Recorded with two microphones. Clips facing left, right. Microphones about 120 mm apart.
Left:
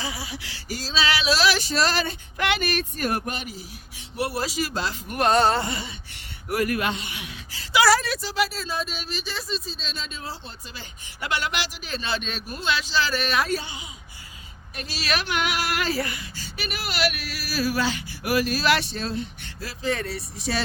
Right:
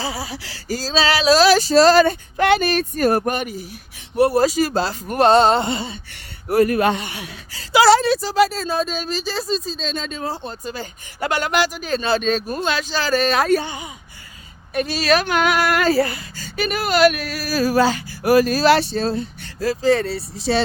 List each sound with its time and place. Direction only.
0.0 s speech: 35° right (ahead or behind)
3.3 s speech: 55° right (ahead or behind)
4.2 s speech: 45° right (ahead or behind)
6.9 s speech: 45° right (ahead or behind); by 8.2 s 25° right (ahead or behind)
8.2 s speech: 40° right (ahead or behind)
13.5 s speech: 55° right (ahead or behind)
15.0 s speech: 40° right (ahead or behind)